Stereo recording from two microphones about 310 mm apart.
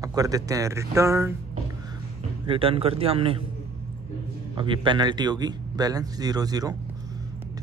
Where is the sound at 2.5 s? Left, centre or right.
Centre.